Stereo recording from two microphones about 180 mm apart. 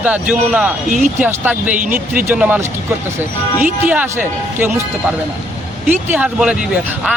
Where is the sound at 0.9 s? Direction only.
40° right (ahead or behind).